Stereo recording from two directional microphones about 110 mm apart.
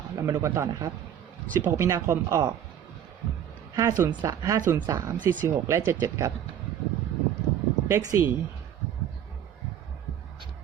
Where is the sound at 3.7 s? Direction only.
25° right (ahead or behind).